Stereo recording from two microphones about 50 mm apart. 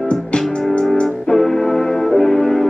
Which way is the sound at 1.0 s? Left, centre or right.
Centre.